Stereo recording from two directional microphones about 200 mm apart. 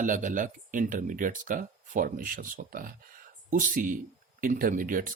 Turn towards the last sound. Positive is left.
turn(degrees=-45)  # may be behind; listen again after turning